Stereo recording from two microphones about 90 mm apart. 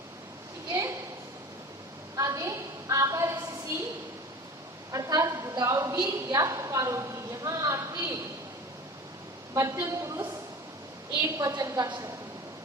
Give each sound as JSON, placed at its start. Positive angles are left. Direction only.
{"t": 0.7, "sound": "a sound", "side_deg": -35}
{"t": 2.1, "sound": "a sound", "side_deg": -40}
{"t": 4.9, "sound": "a woman's voice", "side_deg": -40}
{"t": 6.3, "sound": "a woman's voice", "side_deg": -40}
{"t": 9.6, "sound": "a woman's voice", "side_deg": -35}
{"t": 11.2, "sound": "a woman's voice", "side_deg": -40}